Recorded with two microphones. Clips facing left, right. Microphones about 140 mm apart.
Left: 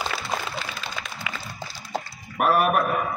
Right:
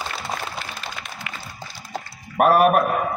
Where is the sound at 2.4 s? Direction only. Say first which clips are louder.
Right 5 dB; 45° right (ahead or behind).